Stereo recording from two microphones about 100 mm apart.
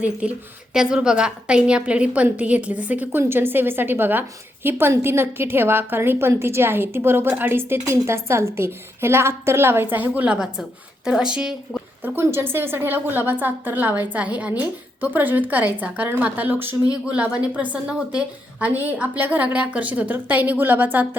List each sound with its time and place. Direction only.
0.2 s a woman's voice: 10° right (ahead or behind)
12.0 s a woman's voice: 25° right (ahead or behind)